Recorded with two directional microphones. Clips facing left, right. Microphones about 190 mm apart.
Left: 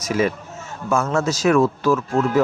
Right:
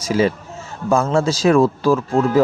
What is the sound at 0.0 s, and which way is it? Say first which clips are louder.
A man's voice: right 3 dB; 30° right (ahead or behind).